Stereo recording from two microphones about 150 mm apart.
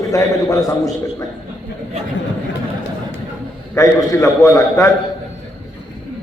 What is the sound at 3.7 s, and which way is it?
A man's voice, 20° left (ahead or behind).